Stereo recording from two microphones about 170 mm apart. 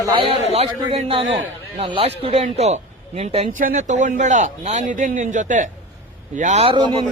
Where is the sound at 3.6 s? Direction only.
45° right (ahead or behind); by 6.9 s 30° right (ahead or behind).